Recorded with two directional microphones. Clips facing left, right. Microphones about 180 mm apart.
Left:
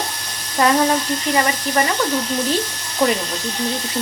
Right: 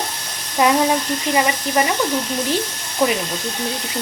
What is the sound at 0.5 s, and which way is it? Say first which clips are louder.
Speech: even; 10° right (ahead or behind).